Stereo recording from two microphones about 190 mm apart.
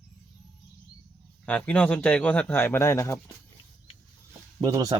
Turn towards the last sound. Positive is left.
turn(degrees=-20)  # may be behind; listen again after turning